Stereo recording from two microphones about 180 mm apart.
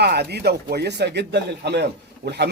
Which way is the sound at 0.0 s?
65° right (ahead or behind).